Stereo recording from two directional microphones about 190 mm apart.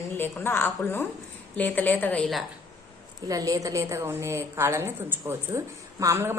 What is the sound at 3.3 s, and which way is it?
A woman's voice, 20° right (ahead or behind).